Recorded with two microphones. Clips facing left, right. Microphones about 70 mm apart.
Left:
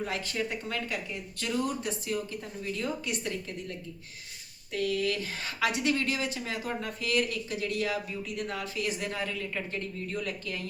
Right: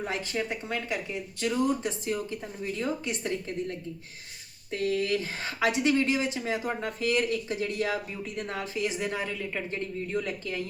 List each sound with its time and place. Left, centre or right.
0.0 s speech: right